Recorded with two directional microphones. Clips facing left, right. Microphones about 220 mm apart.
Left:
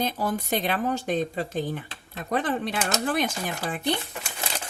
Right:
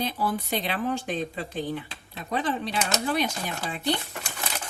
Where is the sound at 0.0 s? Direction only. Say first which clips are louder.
Left 1 dB; 45° left (ahead or behind).